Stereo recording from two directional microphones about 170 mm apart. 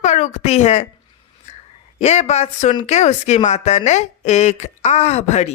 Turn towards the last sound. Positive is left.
turn(degrees=40)  # may be behind; listen again after turning